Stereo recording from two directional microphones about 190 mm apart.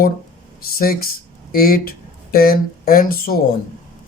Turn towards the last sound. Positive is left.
turn(degrees=50)  # may be behind; listen again after turning